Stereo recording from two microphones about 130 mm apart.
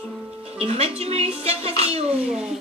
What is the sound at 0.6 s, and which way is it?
Speech, 50° right (ahead or behind).